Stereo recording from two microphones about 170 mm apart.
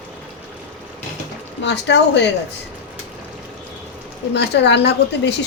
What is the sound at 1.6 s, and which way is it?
Speech, 90° left.